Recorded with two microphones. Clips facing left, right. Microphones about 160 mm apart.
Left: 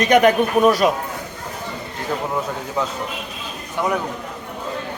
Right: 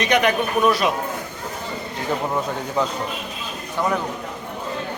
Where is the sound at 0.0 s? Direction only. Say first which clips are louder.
Left 5 dB; 45° left (ahead or behind).